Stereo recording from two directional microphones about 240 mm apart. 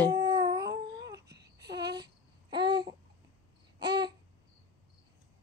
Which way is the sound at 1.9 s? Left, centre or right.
Centre.